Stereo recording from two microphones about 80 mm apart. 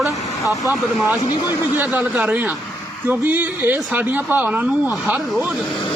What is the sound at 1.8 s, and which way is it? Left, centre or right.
A man's voice, right.